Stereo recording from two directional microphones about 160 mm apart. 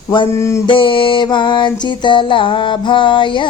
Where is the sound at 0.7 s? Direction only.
30° left (ahead or behind).